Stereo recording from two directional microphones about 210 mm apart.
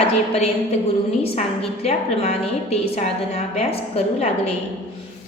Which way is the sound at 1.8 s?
30° left (ahead or behind).